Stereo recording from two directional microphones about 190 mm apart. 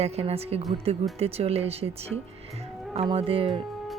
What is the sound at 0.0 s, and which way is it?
Speech, 30° right (ahead or behind).